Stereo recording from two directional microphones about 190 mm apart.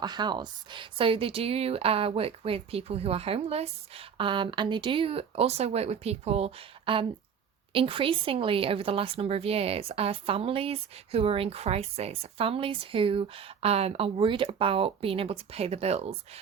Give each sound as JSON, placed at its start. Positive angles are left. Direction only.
{"t": 0.0, "sound": "a woman's voice", "side_deg": -20}